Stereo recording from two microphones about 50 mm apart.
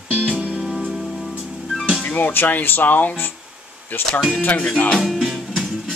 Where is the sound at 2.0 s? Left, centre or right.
Left.